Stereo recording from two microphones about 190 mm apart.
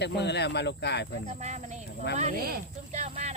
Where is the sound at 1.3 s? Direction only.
35° right (ahead or behind).